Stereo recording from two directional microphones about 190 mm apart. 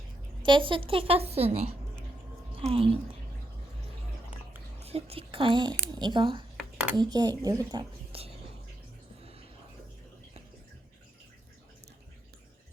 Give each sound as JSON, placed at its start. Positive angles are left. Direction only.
{"t": 0.4, "sound": "a woman's voice", "side_deg": -25}
{"t": 4.8, "sound": "a woman's voice", "side_deg": -30}